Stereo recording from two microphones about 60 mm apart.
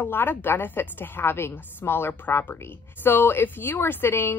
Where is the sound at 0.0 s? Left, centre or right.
Left.